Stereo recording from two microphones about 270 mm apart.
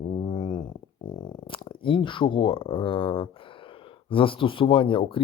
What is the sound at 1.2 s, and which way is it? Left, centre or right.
Speech, centre.